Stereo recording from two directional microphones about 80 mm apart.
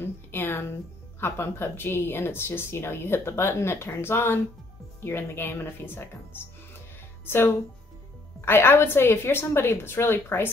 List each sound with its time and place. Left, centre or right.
0.0 s a woman's voice: left